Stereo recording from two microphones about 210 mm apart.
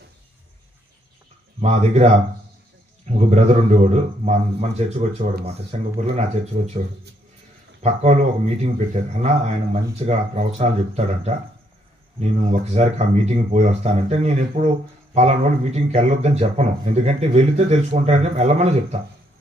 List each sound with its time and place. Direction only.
1.6 s speech: 30° right (ahead or behind)
7.8 s speech: 35° right (ahead or behind)